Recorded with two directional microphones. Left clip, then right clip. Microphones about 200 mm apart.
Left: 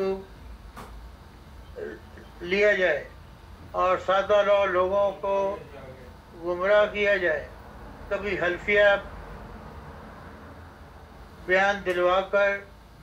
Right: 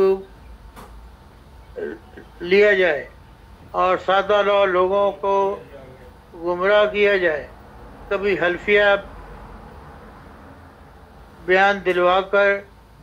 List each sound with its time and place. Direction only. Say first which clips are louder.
1.8 s a sound: right 7 dB; 40° right (ahead or behind)
2.4 s speech: right 7 dB; 40° right (ahead or behind)
11.4 s speech: right 6 dB; 40° right (ahead or behind)